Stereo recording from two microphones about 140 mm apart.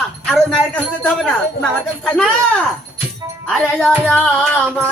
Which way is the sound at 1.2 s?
Centre (ahead or behind).